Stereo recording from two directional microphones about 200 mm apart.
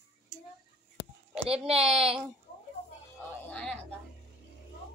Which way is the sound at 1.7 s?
30° right (ahead or behind).